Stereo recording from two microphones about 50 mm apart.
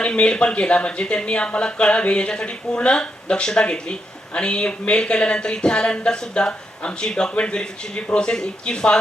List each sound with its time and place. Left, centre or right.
0.0 s speech: left